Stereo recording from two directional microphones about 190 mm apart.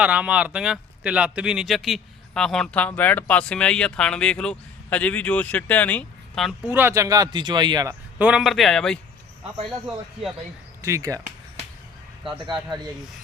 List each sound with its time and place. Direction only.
0.0 s speech: 5° right (ahead or behind)
6.7 s speech: 10° right (ahead or behind)
8.2 s speech: 5° right (ahead or behind)
10.8 s speech: 15° right (ahead or behind)
12.2 s speech: 25° right (ahead or behind)